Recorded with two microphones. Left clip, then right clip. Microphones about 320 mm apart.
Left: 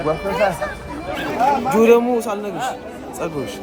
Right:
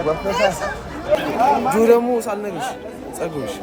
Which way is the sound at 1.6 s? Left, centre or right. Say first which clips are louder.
Left 1 dB; left.